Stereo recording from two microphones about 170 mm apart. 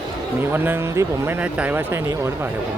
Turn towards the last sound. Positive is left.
turn(degrees=-10)  # may be behind; listen again after turning